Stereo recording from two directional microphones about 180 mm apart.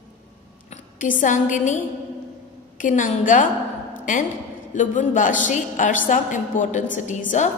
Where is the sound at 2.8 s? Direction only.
45° left (ahead or behind).